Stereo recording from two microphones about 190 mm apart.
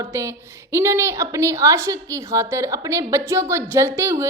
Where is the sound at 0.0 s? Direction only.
15° right (ahead or behind).